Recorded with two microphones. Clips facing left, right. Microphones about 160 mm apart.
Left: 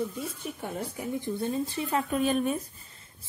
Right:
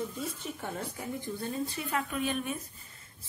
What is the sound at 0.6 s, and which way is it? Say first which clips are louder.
A woman's voice: left 3 dB; 15° left (ahead or behind).